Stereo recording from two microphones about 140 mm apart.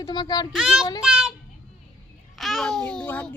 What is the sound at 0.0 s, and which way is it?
Speech, 30° left (ahead or behind).